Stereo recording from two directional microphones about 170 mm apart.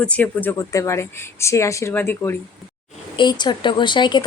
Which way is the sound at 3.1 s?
25° left (ahead or behind).